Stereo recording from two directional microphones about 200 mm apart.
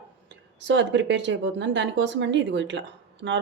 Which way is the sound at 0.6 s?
65° right (ahead or behind).